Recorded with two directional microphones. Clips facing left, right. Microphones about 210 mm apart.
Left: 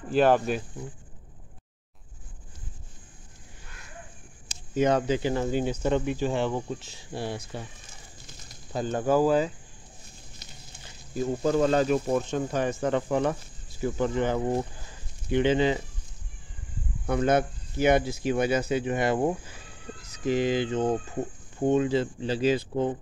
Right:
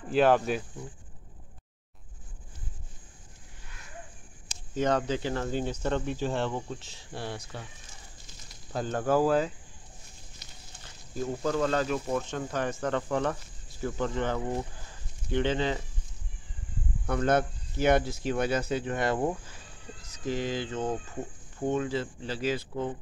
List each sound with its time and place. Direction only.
0.1 s speech: centre (ahead or behind)
4.5 s speech: 5° left (ahead or behind)
8.7 s speech: 5° left (ahead or behind)
11.4 s speech: 20° left (ahead or behind)
17.0 s speech: 10° left (ahead or behind)